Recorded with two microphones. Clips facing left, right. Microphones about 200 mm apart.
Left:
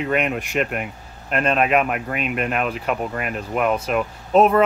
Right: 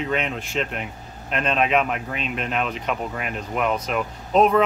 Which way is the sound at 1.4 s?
5° left (ahead or behind).